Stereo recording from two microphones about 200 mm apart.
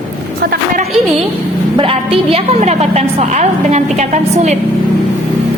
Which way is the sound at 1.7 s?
30° right (ahead or behind).